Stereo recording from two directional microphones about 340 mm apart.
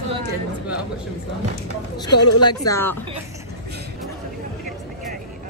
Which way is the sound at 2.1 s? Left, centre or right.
Left.